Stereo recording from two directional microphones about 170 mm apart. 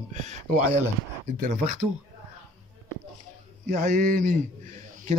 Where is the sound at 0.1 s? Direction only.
45° right (ahead or behind).